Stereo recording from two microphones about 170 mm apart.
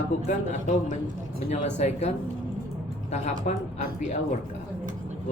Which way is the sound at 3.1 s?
45° left (ahead or behind).